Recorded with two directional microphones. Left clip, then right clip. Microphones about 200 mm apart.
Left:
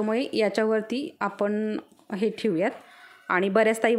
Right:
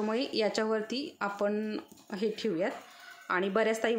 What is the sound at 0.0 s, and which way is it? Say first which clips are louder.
A woman's voice: left 6 dB; 35° left (ahead or behind).